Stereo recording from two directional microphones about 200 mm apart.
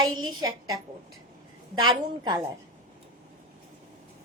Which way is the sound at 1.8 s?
20° right (ahead or behind).